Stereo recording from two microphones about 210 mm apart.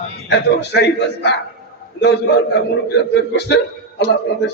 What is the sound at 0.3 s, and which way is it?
A man's voice, 55° left (ahead or behind).